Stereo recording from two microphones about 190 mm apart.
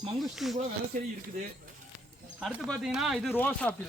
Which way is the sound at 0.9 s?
45° right (ahead or behind).